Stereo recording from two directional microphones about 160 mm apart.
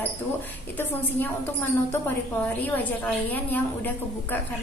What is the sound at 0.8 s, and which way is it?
A woman's voice, 10° left (ahead or behind).